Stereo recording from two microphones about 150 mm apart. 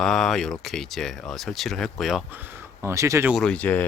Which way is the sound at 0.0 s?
5° left (ahead or behind).